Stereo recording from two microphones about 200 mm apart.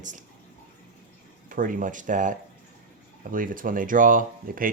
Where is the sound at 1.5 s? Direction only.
45° right (ahead or behind).